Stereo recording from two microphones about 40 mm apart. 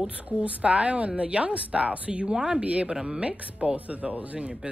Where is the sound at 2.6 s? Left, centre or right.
Right.